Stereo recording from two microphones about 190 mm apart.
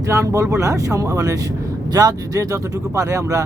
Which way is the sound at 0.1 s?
15° right (ahead or behind).